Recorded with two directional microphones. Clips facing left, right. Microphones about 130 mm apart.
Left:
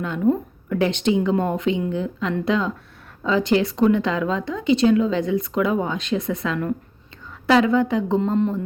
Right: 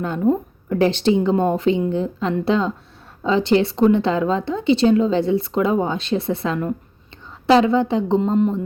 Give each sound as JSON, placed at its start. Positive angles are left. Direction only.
{"t": 0.3, "sound": "a woman's voice", "side_deg": -35}